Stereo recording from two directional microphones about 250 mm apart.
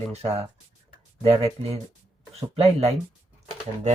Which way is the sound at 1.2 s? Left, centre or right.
Right.